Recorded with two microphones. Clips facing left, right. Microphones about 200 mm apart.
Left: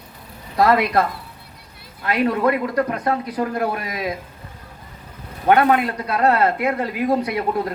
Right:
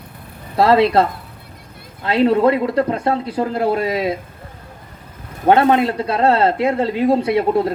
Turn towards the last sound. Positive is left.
turn(degrees=-25)  # may be behind; listen again after turning